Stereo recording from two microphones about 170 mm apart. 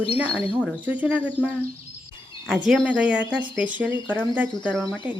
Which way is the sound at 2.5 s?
5° right (ahead or behind).